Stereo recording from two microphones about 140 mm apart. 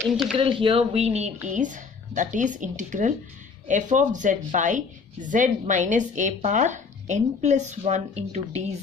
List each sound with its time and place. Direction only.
0.0 s speech: centre (ahead or behind)
0.4 s speech: 40° right (ahead or behind)
1.5 s a woman's voice: 65° right (ahead or behind)